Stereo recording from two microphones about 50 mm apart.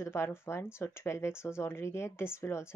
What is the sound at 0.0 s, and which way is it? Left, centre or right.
Speech, left.